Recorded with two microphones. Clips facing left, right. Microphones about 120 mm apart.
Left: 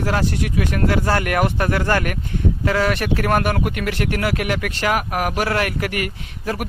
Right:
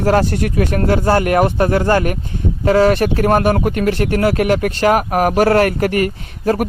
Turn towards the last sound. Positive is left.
turn(degrees=-40)  # may be behind; listen again after turning